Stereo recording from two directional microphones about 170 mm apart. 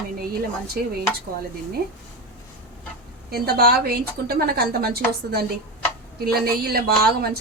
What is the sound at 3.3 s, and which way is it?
Speech, 65° right (ahead or behind).